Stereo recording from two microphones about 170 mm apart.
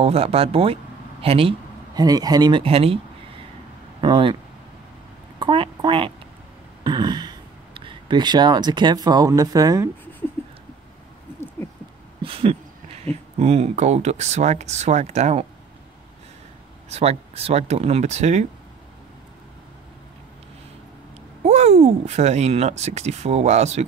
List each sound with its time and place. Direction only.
0.0 s speech: 35° right (ahead or behind)
2.0 s speech: 20° right (ahead or behind)
4.0 s speech: 30° right (ahead or behind)
5.4 s a woman's voice: 30° right (ahead or behind)
12.2 s a sound: 35° right (ahead or behind)
13.4 s speech: 40° right (ahead or behind)
16.9 s speech: 35° right (ahead or behind)
21.4 s speech: 40° right (ahead or behind)